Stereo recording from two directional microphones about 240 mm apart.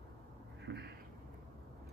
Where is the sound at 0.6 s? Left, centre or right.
Right.